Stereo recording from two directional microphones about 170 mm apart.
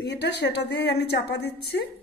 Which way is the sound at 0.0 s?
75° left (ahead or behind).